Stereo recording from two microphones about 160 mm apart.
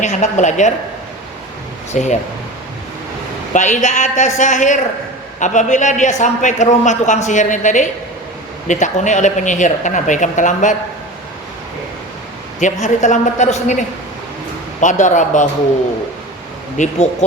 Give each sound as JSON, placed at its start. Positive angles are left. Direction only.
{"t": 0.0, "sound": "speech", "side_deg": 45}
{"t": 2.0, "sound": "speech", "side_deg": 50}
{"t": 3.5, "sound": "speech", "side_deg": 50}
{"t": 12.5, "sound": "speech", "side_deg": 50}
{"t": 16.7, "sound": "speech", "side_deg": 50}